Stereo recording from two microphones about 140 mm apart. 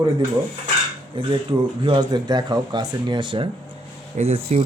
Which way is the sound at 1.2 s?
35° right (ahead or behind).